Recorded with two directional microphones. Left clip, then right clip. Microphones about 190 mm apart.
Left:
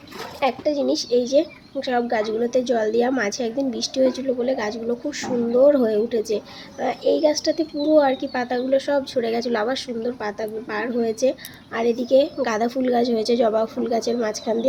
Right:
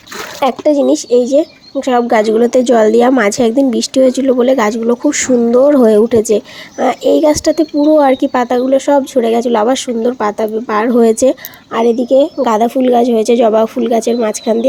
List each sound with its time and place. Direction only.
0.3 s speech: 45° right (ahead or behind)